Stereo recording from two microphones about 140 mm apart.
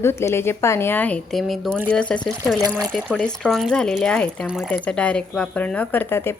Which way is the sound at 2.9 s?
5° right (ahead or behind).